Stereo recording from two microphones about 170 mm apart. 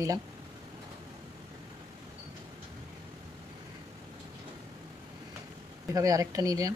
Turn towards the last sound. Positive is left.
turn(degrees=-20)  # may be behind; listen again after turning